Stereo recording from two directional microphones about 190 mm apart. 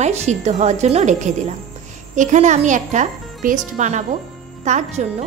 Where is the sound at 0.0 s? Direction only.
35° right (ahead or behind).